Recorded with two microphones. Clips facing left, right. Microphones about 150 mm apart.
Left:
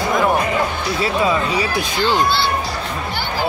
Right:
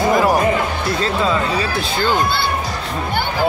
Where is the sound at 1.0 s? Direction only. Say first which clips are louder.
Left 1 dB; 10° left (ahead or behind).